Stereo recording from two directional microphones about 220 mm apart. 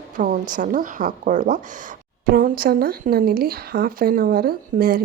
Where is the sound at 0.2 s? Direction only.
35° right (ahead or behind).